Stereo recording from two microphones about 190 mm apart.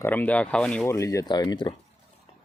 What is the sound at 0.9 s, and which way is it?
Speech, 15° left (ahead or behind).